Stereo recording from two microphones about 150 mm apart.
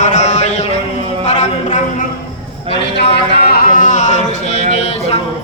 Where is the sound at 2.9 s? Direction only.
90° left; by 4.6 s 50° left (ahead or behind).